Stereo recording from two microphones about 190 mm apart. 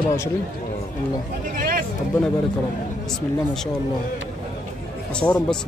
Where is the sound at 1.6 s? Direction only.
50° right (ahead or behind).